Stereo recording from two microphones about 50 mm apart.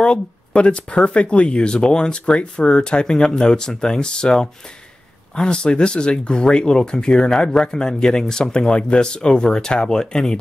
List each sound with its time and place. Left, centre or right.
0.0 s speech: left